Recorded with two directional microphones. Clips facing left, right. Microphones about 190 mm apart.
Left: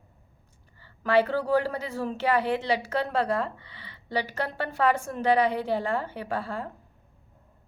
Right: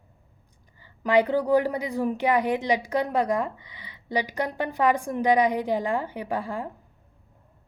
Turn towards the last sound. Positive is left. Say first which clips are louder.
# right 2 dB
turn(degrees=-15)  # may be behind; listen again after turning